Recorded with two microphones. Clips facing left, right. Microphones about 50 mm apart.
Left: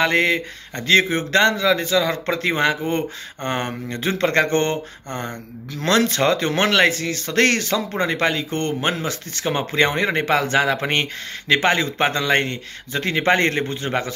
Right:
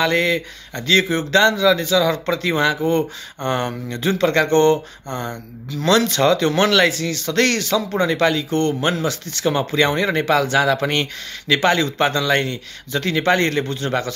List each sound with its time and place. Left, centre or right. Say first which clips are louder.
0.0 s speech: even; left
13.7 s speech: right 2 dB; left